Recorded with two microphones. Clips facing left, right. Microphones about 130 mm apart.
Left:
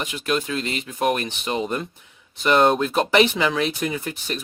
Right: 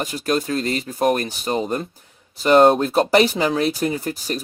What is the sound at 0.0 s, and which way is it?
Speech, 40° right (ahead or behind).